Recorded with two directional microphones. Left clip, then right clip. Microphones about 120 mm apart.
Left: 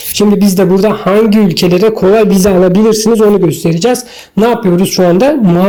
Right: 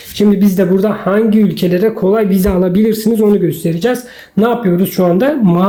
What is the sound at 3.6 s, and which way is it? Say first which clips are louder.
A woman's voice: left 4 dB; 30° left (ahead or behind).